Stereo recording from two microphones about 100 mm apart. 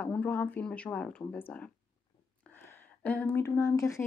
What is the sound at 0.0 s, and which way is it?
Speech, 15° left (ahead or behind).